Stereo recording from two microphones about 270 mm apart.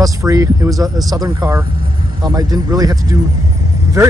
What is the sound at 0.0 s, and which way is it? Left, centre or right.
Speech, centre.